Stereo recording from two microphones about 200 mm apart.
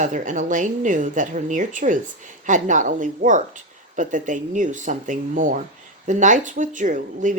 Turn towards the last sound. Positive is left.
turn(degrees=-40)  # may be behind; listen again after turning